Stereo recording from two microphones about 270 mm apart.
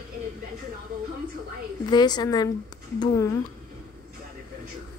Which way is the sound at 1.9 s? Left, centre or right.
Centre.